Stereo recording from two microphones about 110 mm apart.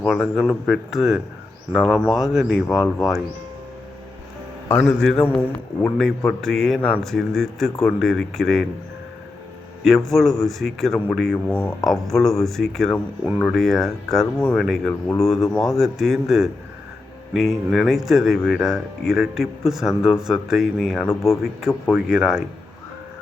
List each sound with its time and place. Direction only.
0.1 s speech: centre (ahead or behind)
2.7 s speech: 30° left (ahead or behind)
4.7 s a man's voice: 5° left (ahead or behind)
9.8 s a man's voice: centre (ahead or behind)